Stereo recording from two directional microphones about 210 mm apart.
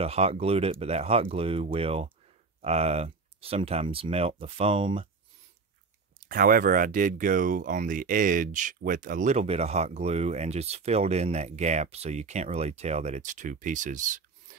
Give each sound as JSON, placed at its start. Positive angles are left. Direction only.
{"t": 0.0, "sound": "speech", "side_deg": -30}
{"t": 6.2, "sound": "speech", "side_deg": -45}